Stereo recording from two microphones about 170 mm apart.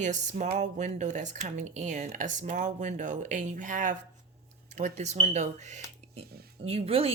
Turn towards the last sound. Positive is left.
turn(degrees=-35)  # may be behind; listen again after turning